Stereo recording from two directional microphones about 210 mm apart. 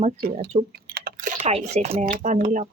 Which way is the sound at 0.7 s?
50° right (ahead or behind).